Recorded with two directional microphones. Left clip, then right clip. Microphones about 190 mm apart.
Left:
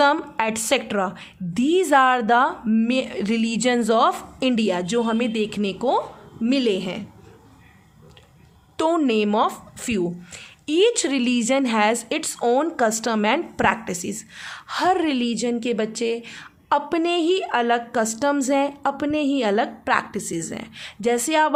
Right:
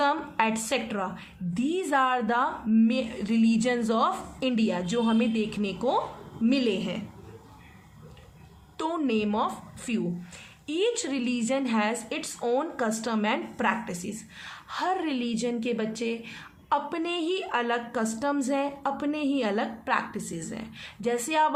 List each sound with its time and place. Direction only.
0.0 s speech: 50° left (ahead or behind)
8.8 s speech: 50° left (ahead or behind)